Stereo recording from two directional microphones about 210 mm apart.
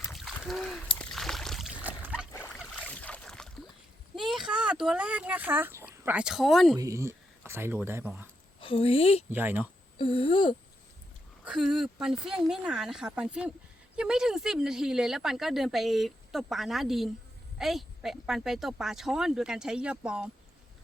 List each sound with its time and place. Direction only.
0.1 s a sound: centre (ahead or behind)
2.8 s boat: 5° left (ahead or behind)
4.1 s speech: centre (ahead or behind)
6.7 s speech: 15° right (ahead or behind)
8.6 s speech: 25° left (ahead or behind)
9.3 s speech: 10° right (ahead or behind)
10.0 s speech: 25° left (ahead or behind)
11.4 s speech: centre (ahead or behind)